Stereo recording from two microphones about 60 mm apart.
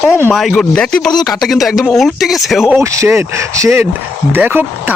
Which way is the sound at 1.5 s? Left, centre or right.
Centre.